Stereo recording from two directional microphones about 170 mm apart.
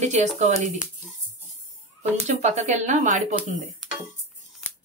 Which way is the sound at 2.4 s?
45° right (ahead or behind).